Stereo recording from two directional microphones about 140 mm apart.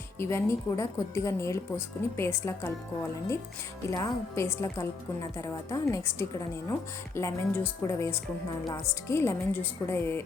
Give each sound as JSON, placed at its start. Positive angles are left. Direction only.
{"t": 0.2, "sound": "a woman's voice", "side_deg": 20}
{"t": 3.8, "sound": "a woman's voice", "side_deg": 20}